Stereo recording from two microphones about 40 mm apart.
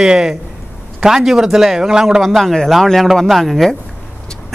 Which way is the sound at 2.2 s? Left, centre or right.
Centre.